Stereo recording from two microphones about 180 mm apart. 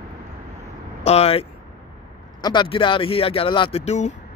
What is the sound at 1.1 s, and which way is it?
Speech, 35° left (ahead or behind).